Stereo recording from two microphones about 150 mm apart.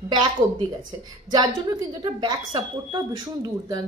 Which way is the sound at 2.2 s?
30° right (ahead or behind).